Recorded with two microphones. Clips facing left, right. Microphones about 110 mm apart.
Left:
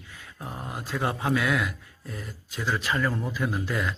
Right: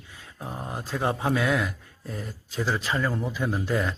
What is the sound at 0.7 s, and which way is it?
Speech, 30° right (ahead or behind).